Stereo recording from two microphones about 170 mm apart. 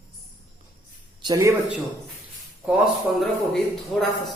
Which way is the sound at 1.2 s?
20° right (ahead or behind).